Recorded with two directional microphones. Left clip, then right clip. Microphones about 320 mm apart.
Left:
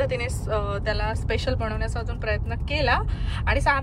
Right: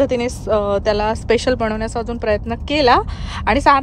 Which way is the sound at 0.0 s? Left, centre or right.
Centre.